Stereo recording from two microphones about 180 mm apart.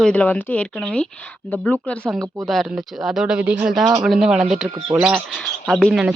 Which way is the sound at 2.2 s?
20° right (ahead or behind).